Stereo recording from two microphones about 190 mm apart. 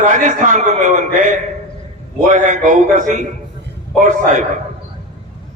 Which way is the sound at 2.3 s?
40° right (ahead or behind).